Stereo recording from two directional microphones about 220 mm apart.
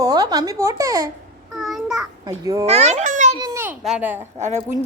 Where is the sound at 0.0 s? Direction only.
15° right (ahead or behind).